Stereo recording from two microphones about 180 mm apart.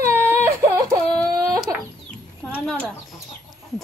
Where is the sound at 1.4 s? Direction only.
20° right (ahead or behind).